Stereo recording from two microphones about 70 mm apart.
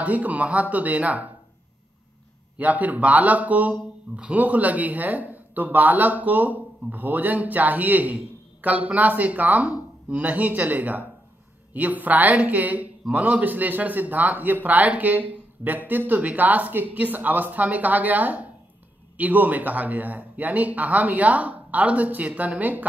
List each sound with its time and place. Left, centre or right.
0.0 s speech: right
2.6 s speech: right